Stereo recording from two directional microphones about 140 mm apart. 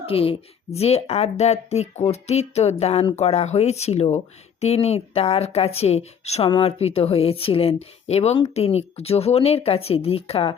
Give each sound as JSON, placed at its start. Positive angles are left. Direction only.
{"t": 0.0, "sound": "a woman's voice", "side_deg": 40}